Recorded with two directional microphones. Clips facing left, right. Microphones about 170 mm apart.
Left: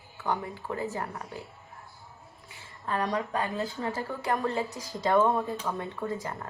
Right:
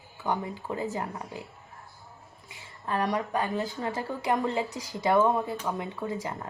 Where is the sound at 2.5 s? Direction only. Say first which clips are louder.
Right 1 dB; 15° right (ahead or behind).